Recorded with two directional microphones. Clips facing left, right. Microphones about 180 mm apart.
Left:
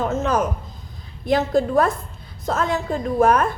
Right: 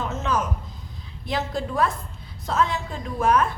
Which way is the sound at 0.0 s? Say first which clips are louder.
Left 5 dB; 40° left (ahead or behind).